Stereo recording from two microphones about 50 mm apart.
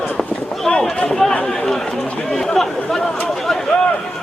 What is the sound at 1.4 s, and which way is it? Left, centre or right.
Run, centre.